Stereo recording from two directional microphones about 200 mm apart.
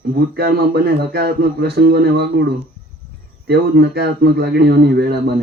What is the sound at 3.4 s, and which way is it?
A man's voice, 55° right (ahead or behind).